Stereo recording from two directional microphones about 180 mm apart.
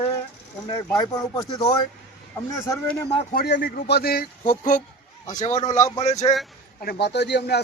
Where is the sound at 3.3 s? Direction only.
65° left (ahead or behind).